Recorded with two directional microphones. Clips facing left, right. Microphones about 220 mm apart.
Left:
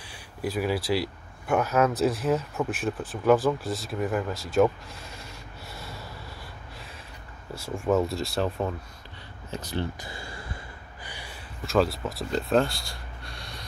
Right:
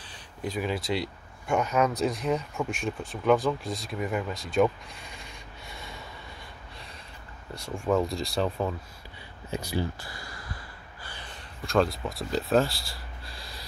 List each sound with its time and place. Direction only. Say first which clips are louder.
0.0 s speech: left 3 dB; 10° left (ahead or behind)
7.5 s speech: left 2 dB; 5° left (ahead or behind)
9.5 s speech: right 1 dB; 10° right (ahead or behind)
9.9 s a sound: left 3 dB; 25° left (ahead or behind)
11.1 s gasp: left 2 dB; 15° left (ahead or behind)
11.6 s speech: left 1 dB; centre (ahead or behind)